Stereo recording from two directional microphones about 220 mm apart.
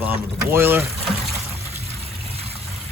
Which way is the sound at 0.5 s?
10° right (ahead or behind).